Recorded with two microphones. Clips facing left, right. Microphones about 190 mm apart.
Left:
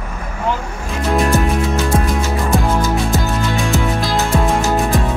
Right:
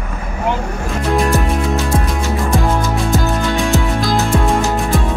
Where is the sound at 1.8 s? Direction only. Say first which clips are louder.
Left 1 dB; centre (ahead or behind).